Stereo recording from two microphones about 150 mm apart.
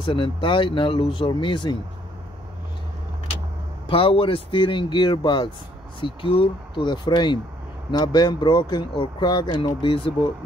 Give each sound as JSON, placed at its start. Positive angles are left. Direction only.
{"t": 0.0, "sound": "speech", "side_deg": 35}
{"t": 3.8, "sound": "speech", "side_deg": 35}